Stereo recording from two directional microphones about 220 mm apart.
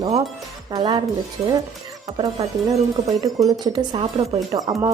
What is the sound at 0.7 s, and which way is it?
Speech, 20° right (ahead or behind).